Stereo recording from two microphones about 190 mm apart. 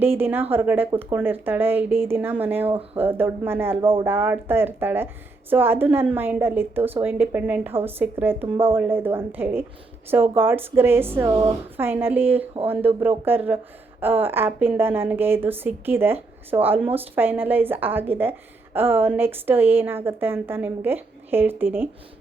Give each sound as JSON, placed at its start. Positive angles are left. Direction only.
{"t": 0.0, "sound": "a woman's voice", "side_deg": -10}
{"t": 3.8, "sound": "speech", "side_deg": -30}
{"t": 4.0, "sound": "a woman's voice", "side_deg": -10}